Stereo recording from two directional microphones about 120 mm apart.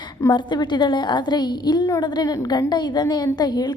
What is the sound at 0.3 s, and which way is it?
A woman's voice, 40° left (ahead or behind).